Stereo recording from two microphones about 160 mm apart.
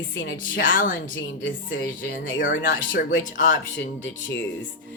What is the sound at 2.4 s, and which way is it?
Speech, 60° left (ahead or behind).